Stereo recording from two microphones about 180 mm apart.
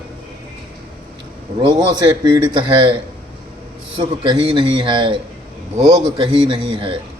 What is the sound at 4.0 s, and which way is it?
A man's voice, 25° right (ahead or behind).